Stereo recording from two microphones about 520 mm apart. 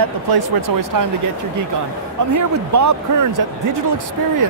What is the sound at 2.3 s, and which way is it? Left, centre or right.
Speech, right.